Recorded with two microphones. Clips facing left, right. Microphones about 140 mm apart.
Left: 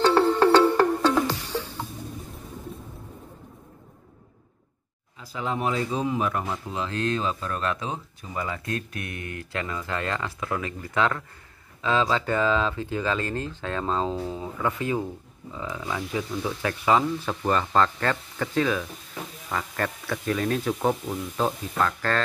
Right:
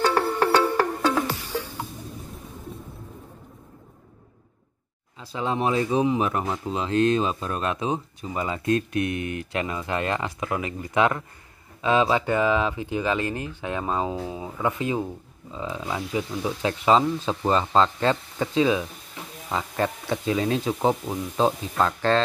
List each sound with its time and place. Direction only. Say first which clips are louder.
0.0 s music: left 3 dB; 10° right (ahead or behind)
5.3 s speech: right 3 dB; 25° right (ahead or behind)